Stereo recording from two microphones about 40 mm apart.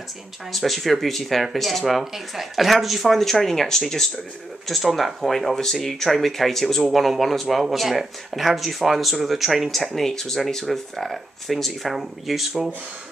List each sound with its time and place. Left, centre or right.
0.5 s speech: centre